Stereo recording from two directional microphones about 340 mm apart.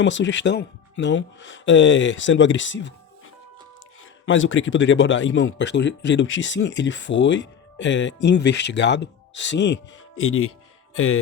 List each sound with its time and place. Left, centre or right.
0.0 s speech: left
4.3 s speech: left